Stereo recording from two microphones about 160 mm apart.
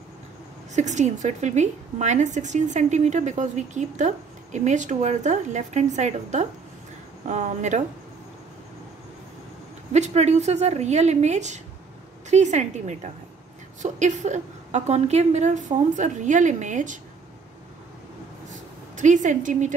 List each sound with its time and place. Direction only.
0.7 s a woman's voice: 45° right (ahead or behind)
9.9 s a woman's voice: 45° right (ahead or behind)
18.5 s a sound: 50° right (ahead or behind)